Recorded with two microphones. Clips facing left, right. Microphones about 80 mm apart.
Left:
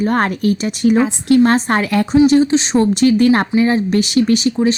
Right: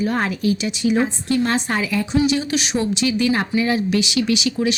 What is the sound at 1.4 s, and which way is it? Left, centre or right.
Speech, left.